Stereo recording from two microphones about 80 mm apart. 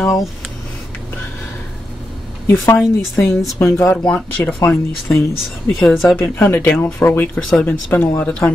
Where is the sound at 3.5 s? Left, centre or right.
Left.